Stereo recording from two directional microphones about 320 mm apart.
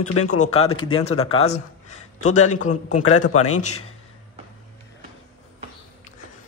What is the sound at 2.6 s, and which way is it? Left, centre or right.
Speech, left.